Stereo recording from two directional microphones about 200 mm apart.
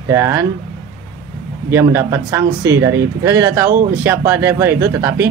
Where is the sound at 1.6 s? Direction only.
10° right (ahead or behind).